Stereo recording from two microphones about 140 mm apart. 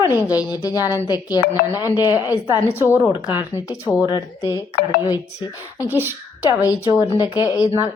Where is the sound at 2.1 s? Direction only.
15° right (ahead or behind).